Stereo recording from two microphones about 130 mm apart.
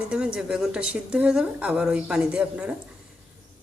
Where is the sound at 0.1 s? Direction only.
10° right (ahead or behind).